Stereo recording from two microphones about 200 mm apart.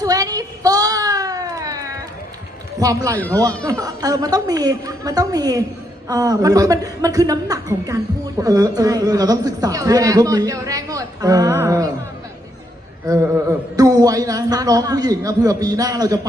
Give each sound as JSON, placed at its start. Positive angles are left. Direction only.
{"t": 0.0, "sound": "a sound", "side_deg": -20}
{"t": 2.7, "sound": "a man's voice", "side_deg": -15}
{"t": 13.1, "sound": "speech", "side_deg": -15}